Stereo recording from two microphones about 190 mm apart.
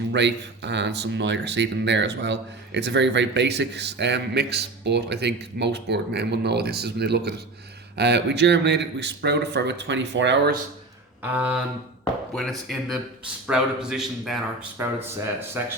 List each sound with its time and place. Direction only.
0.1 s speech: 65° right (ahead or behind)
11.2 s a sound: 10° right (ahead or behind)
12.3 s a man's voice: centre (ahead or behind)